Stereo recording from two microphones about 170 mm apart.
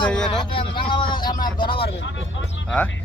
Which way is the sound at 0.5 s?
30° left (ahead or behind).